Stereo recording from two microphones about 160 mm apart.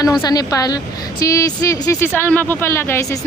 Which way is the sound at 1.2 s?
20° left (ahead or behind).